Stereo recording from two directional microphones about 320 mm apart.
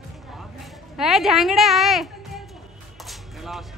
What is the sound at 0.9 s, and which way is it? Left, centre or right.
A woman's voice, centre.